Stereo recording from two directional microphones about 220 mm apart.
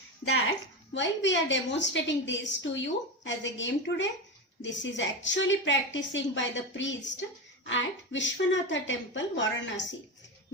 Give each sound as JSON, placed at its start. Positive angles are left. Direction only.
{"t": 0.9, "sound": "a woman's voice", "side_deg": 55}